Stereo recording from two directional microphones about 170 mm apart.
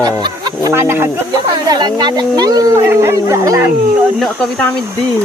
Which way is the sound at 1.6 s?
25° right (ahead or behind).